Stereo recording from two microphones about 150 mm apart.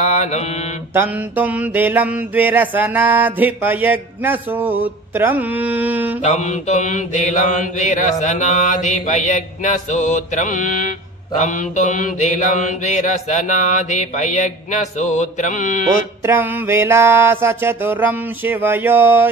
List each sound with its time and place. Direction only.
0.0 s mantra: 50° left (ahead or behind)
0.9 s mantra: 10° right (ahead or behind)
6.2 s mantra: 50° left (ahead or behind)
16.2 s mantra: 15° right (ahead or behind)